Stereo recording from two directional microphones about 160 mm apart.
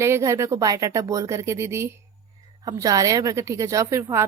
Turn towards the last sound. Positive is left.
turn(degrees=-15)  # may be behind; listen again after turning